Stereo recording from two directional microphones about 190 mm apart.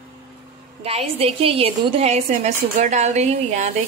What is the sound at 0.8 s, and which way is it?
A woman's voice, 30° right (ahead or behind).